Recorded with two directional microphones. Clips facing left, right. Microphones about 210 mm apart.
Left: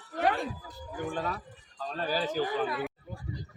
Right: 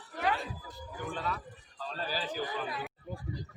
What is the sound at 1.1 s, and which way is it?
Speech, 45° left (ahead or behind).